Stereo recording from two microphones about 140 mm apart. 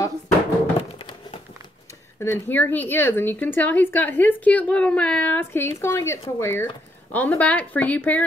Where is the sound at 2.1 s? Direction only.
15° left (ahead or behind).